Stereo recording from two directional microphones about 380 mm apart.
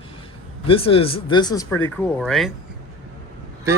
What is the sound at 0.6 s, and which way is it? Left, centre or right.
Speech, centre.